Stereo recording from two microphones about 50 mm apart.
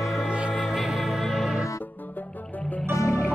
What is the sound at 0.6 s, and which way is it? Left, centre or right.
Music, centre.